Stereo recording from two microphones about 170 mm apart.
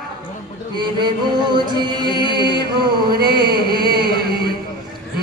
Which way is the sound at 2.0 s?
25° left (ahead or behind).